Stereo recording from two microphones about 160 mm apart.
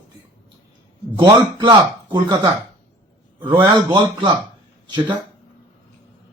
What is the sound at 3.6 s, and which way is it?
Speech, 30° right (ahead or behind).